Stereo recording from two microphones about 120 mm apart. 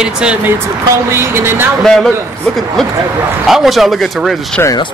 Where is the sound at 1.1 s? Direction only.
20° right (ahead or behind).